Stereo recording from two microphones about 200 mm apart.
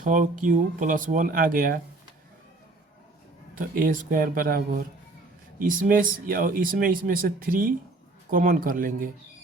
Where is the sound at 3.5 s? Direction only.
45° right (ahead or behind).